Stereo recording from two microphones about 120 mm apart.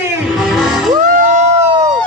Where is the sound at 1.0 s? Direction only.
85° right.